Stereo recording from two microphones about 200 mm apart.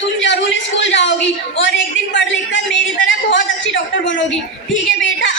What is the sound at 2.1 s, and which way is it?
Speech, 65° left (ahead or behind).